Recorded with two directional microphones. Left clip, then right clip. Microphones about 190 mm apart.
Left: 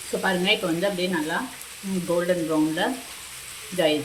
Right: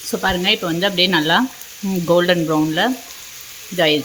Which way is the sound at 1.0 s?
60° right (ahead or behind).